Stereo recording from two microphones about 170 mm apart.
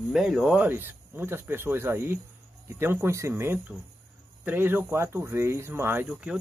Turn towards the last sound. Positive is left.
turn(degrees=-10)  # may be behind; listen again after turning